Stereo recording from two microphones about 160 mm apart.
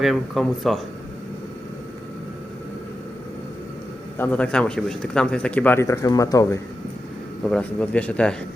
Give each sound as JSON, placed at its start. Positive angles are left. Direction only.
{"t": 0.0, "sound": "speech", "side_deg": 0}
{"t": 4.2, "sound": "speech", "side_deg": 10}
{"t": 7.4, "sound": "speech", "side_deg": 5}